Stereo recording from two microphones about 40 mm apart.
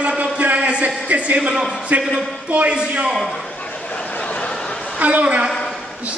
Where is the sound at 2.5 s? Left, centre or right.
Right.